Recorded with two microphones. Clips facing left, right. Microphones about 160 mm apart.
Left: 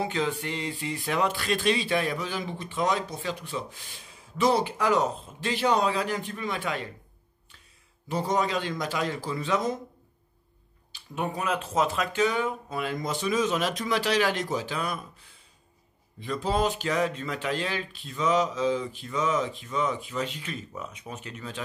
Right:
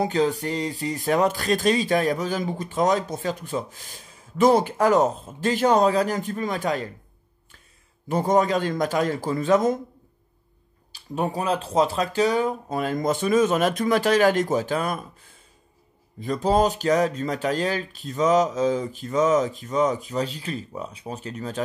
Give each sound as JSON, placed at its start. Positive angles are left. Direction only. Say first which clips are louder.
{"t": 0.0, "sound": "speech", "louder": "right 6 dB", "side_deg": -40}
{"t": 8.1, "sound": "speech", "louder": "right 6 dB", "side_deg": -50}
{"t": 10.9, "sound": "speech", "louder": "right 5 dB", "side_deg": -35}
{"t": 16.2, "sound": "speech", "louder": "right 6 dB", "side_deg": -40}